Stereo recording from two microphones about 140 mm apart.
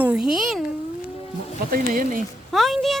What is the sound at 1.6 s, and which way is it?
Speech, 85° right.